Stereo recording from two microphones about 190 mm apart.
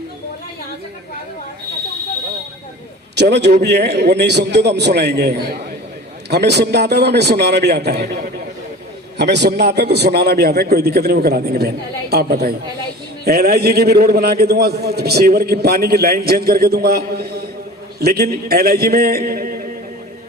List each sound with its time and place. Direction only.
3.2 s a man's voice: 65° right (ahead or behind)
8.0 s a man's voice: 45° right (ahead or behind)
9.1 s a man's voice: 65° right (ahead or behind); by 19.7 s 45° right (ahead or behind)